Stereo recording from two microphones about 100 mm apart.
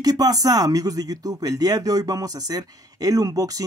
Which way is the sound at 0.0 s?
40° right (ahead or behind).